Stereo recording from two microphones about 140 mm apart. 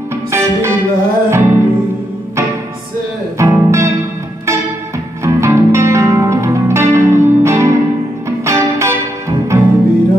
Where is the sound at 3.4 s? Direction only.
20° right (ahead or behind).